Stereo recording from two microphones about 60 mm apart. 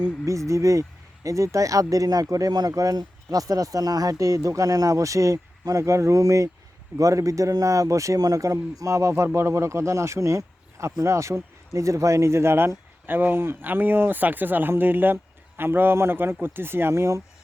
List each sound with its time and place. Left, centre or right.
0.3 s speech: right